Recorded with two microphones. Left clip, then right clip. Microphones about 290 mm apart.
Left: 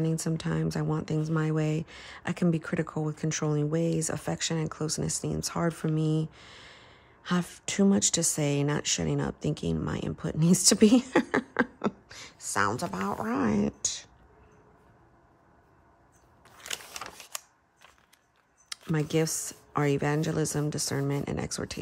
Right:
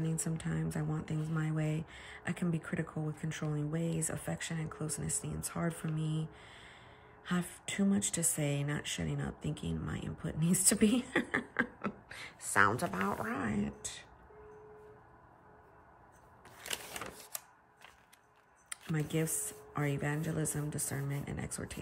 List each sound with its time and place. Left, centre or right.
0.0 s speech: centre
16.4 s a sound: centre
18.7 s speech: centre